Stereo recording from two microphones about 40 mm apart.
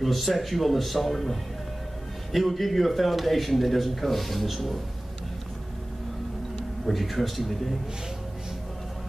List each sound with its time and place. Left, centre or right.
0.0 s a man's voice: centre
6.9 s a man's voice: centre